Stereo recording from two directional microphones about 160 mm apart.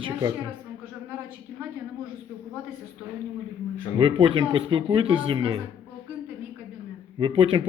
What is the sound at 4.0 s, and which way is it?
A man's voice, 30° right (ahead or behind).